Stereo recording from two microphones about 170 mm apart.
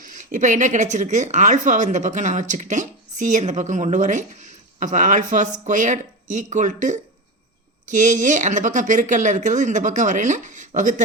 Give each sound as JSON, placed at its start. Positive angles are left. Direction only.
{"t": 0.0, "sound": "speech", "side_deg": -45}